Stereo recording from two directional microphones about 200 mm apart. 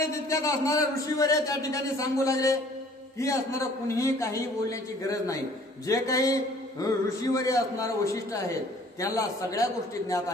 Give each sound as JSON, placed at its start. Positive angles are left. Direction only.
{"t": 0.0, "sound": "a man's voice", "side_deg": 15}